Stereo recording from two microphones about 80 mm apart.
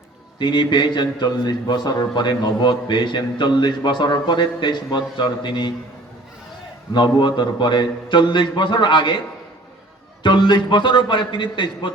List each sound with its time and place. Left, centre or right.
0.3 s a man's voice: left
6.9 s a man's voice: left
10.2 s a man's voice: left